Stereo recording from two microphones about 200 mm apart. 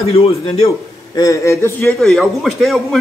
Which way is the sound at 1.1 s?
15° left (ahead or behind).